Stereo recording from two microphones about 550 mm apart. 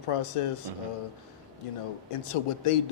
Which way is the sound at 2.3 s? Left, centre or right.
Left.